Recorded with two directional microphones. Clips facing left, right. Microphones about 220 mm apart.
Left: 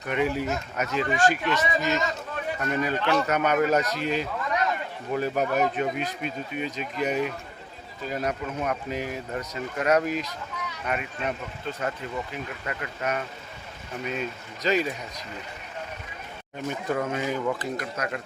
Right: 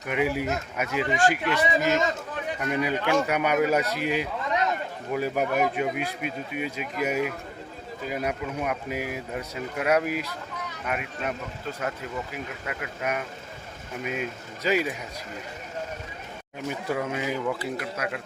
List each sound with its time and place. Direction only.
0.1 s speech: 10° right (ahead or behind)
1.8 s a man's voice: 50° right (ahead or behind)
2.6 s speech: 10° right (ahead or behind)
16.6 s speech: 10° right (ahead or behind)